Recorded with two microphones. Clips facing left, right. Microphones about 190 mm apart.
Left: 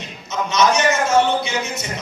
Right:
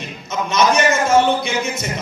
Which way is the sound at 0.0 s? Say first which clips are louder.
Right 1 dB; 55° right (ahead or behind).